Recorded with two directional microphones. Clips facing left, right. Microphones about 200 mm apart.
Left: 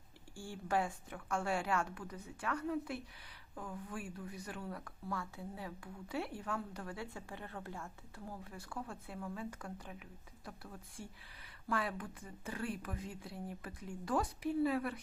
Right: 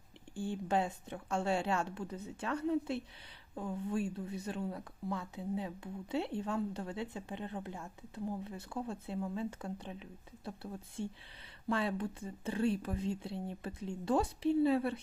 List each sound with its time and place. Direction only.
0.3 s speech: 20° right (ahead or behind)